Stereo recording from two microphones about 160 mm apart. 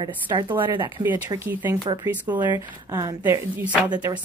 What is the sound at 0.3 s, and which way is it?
Speech, 25° right (ahead or behind).